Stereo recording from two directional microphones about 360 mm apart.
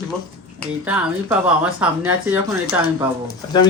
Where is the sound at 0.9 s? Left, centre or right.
Centre.